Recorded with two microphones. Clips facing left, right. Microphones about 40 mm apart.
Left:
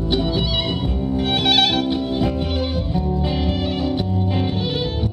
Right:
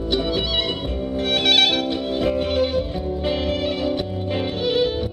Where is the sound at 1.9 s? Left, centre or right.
Centre.